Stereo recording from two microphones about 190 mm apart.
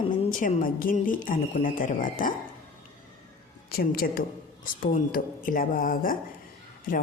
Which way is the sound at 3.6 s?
50° left (ahead or behind).